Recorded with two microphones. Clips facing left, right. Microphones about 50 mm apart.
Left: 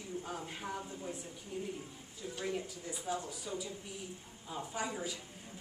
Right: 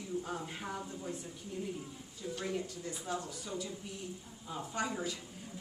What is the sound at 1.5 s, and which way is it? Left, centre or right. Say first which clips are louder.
Speech: even; centre.